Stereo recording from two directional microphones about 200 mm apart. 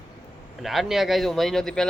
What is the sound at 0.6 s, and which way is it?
Speech, centre (ahead or behind).